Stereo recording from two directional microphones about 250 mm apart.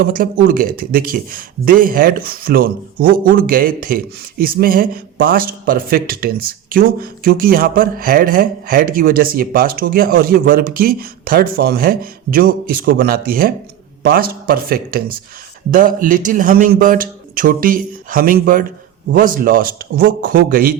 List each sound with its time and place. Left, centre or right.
0.0 s a man's voice: right